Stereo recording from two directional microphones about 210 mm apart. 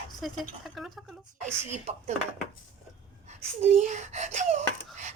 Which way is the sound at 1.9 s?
30° right (ahead or behind).